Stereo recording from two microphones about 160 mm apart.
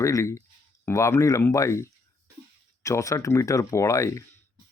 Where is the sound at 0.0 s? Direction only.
20° left (ahead or behind).